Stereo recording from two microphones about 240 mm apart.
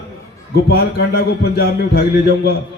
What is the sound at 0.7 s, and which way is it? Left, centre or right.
A man's voice, left.